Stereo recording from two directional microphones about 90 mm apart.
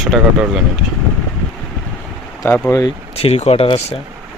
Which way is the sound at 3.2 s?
90° left.